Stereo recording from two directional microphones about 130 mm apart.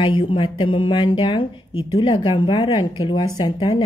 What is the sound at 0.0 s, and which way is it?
Speech, 45° left (ahead or behind).